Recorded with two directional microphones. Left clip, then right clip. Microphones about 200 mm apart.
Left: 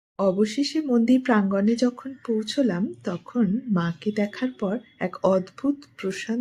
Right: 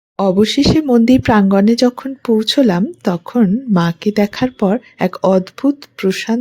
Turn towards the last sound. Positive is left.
turn(degrees=-45)  # may be behind; listen again after turning